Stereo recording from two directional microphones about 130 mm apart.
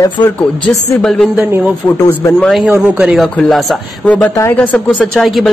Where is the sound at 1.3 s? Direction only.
15° right (ahead or behind).